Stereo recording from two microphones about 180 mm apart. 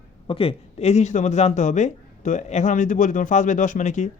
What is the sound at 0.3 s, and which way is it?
A man's voice, 30° left (ahead or behind).